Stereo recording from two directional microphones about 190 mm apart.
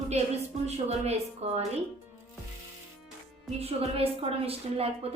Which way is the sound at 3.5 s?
30° right (ahead or behind).